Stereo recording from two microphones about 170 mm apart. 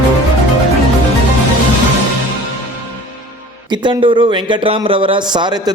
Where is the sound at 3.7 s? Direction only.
30° right (ahead or behind).